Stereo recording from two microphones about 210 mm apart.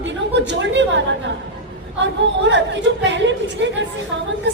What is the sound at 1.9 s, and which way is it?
A woman's voice, 60° right (ahead or behind).